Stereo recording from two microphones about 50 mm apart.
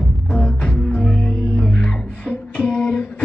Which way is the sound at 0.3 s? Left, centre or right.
Left.